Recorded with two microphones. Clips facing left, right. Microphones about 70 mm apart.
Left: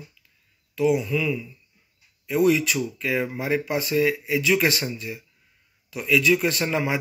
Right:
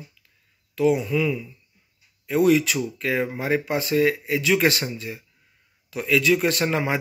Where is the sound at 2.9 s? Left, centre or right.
Right.